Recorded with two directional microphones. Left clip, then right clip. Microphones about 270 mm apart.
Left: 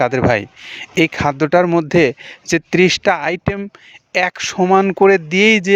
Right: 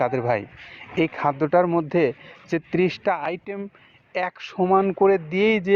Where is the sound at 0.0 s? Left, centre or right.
Left.